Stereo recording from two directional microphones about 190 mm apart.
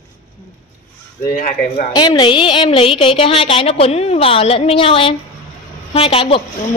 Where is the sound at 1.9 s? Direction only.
25° left (ahead or behind).